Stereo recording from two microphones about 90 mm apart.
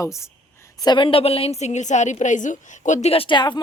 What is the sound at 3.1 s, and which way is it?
Speech, 75° left (ahead or behind).